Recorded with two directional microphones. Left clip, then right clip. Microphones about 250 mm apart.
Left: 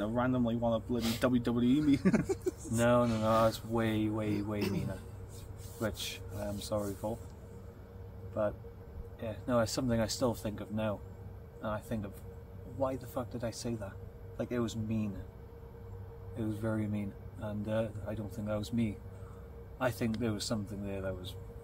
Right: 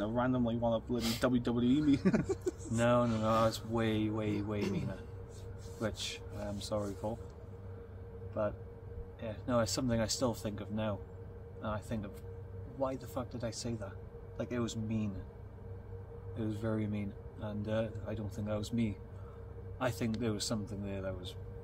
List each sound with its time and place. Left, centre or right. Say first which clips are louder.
0.0 s speech: left 1 dB; centre
0.9 s a man's voice: left 1 dB; centre
1.2 s speech: left 2 dB; centre
2.1 s speech: left 2 dB; left
2.7 s a man's voice: left 2 dB; centre
5.8 s a man's voice: left 1 dB; centre
8.4 s a man's voice: left 2 dB; centre
16.3 s speech: left 1 dB; centre